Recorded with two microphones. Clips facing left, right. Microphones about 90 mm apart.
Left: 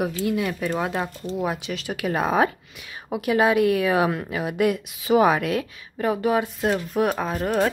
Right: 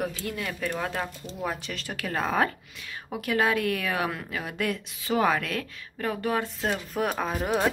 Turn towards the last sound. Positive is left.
turn(degrees=-5)  # may be behind; listen again after turning